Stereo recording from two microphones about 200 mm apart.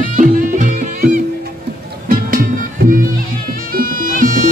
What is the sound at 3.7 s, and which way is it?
Music, 45° right (ahead or behind).